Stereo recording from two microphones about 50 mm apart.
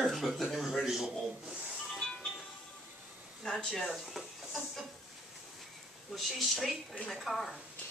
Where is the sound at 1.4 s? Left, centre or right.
Centre.